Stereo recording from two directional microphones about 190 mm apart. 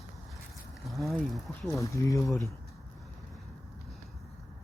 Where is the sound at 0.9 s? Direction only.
Centre (ahead or behind).